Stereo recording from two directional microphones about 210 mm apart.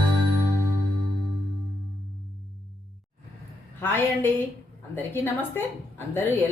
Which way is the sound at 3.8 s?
10° left (ahead or behind).